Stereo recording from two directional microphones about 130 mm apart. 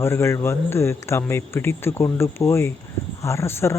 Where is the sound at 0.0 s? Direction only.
20° left (ahead or behind).